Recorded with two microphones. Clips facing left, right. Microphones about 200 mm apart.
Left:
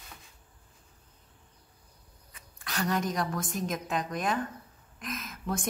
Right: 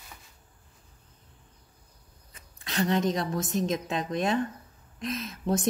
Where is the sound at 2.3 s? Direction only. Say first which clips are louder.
Right 5 dB; 25° right (ahead or behind).